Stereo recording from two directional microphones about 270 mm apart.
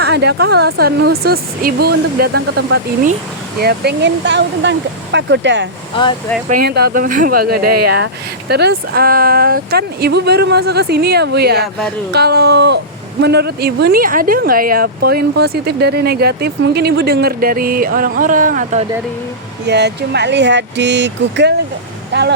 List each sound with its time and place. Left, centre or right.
0.0 s speech: right
5.9 s speech: centre
6.5 s speech: right
19.6 s speech: right